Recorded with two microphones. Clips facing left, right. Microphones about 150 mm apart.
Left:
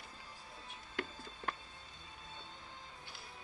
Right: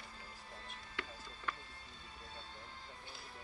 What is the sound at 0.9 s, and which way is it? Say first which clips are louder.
Music: left 5 dB; 50° left (ahead or behind).